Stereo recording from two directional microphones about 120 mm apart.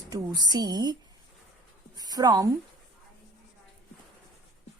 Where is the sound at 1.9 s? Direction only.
35° right (ahead or behind).